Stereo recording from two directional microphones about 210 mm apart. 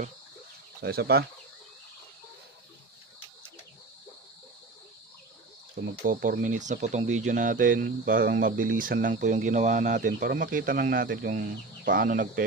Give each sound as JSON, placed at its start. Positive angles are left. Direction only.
{"t": 0.7, "sound": "speech", "side_deg": -45}
{"t": 5.8, "sound": "speech", "side_deg": -45}